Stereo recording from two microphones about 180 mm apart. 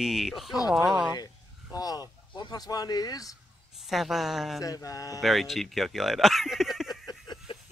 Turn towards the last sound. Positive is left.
turn(degrees=25)  # may be behind; listen again after turning